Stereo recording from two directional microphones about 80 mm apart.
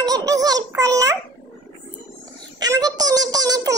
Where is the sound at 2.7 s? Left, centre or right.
Right.